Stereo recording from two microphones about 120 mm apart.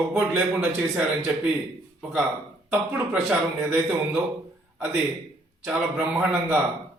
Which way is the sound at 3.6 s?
15° right (ahead or behind).